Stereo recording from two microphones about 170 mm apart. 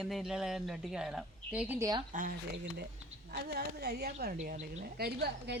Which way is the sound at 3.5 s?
70° right (ahead or behind).